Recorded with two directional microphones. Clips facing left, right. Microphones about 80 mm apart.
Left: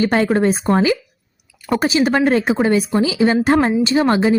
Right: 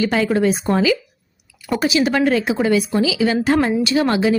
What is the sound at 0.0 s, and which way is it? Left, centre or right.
Speech, left.